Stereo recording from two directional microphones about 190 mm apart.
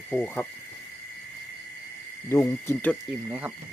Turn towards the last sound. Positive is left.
turn(degrees=-10)  # may be behind; listen again after turning